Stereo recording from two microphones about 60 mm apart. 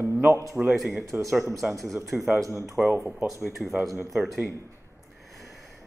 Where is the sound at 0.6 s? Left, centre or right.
Centre.